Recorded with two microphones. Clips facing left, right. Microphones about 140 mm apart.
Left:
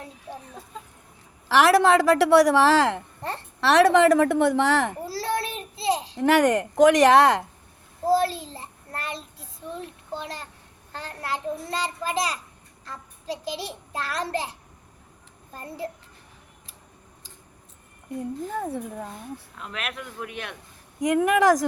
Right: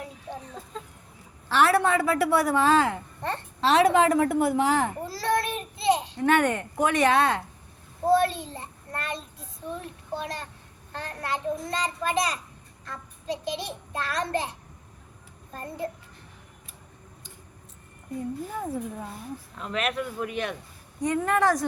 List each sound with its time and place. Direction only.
1.5 s a woman's voice: 90° left
5.0 s a sound: 35° left (ahead or behind)
5.4 s child singing: 30° left (ahead or behind)
6.1 s a woman's voice: 90° left
8.1 s child singing: 30° left (ahead or behind)
11.0 s child singing: 30° left (ahead or behind)
18.2 s a woman's voice: 75° left (ahead or behind)
19.5 s speech: centre (ahead or behind)
21.0 s a woman's voice: 90° left